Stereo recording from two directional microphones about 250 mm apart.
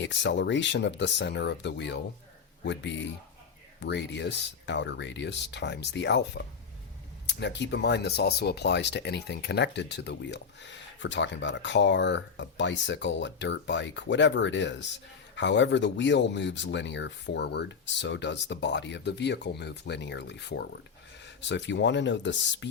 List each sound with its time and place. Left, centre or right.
0.0 s speech: left